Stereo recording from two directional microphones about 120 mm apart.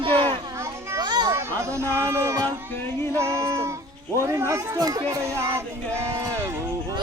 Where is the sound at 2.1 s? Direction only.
25° right (ahead or behind).